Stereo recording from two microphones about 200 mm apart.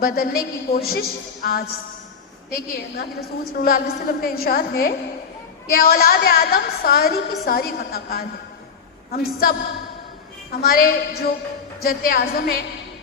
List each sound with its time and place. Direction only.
0.0 s a woman's voice: 50° left (ahead or behind)